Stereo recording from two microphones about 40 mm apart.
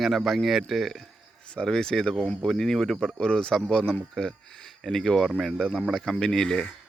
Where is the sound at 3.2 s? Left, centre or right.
Left; by 5.6 s centre.